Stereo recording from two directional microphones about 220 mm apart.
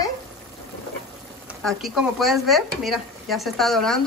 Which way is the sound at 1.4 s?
Centre (ahead or behind).